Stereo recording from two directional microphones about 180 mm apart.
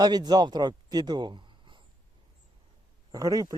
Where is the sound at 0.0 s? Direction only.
20° right (ahead or behind).